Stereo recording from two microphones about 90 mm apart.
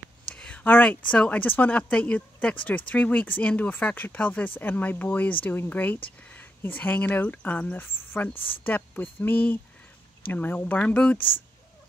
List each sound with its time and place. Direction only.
0.3 s speech: 15° left (ahead or behind)